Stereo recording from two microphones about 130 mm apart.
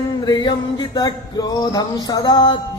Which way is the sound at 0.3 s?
35° left (ahead or behind).